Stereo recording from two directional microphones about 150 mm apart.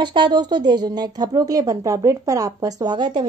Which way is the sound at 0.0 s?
30° right (ahead or behind).